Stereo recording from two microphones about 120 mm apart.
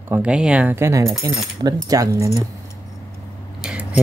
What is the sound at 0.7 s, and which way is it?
Speech, 20° right (ahead or behind).